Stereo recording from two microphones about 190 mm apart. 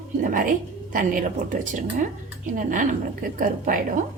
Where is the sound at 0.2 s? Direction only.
45° right (ahead or behind).